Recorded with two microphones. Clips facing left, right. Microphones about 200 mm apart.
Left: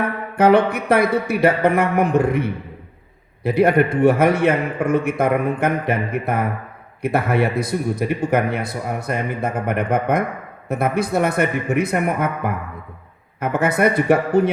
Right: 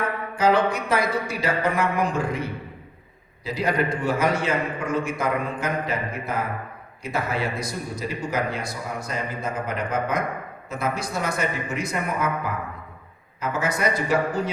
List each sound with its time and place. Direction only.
0.3 s a man's voice: 60° left (ahead or behind)